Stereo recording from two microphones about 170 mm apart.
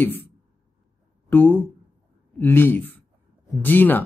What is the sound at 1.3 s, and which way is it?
Speech, 10° left (ahead or behind).